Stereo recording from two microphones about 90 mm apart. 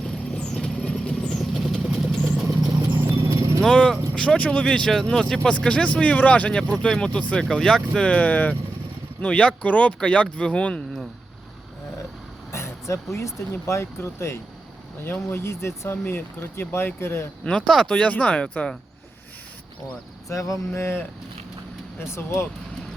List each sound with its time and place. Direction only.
0.3 s vehicle: 10° left (ahead or behind); by 2.5 s 10° right (ahead or behind)
3.2 s vehicle: 35° right (ahead or behind)
3.6 s speech: 5° left (ahead or behind)
12.5 s vehicle: 30° left (ahead or behind)
13.1 s speech: 30° left (ahead or behind)
17.4 s speech: 10° left (ahead or behind)
20.2 s speech: 35° left (ahead or behind)